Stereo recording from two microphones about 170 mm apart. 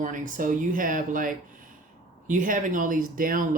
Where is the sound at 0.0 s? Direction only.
50° right (ahead or behind).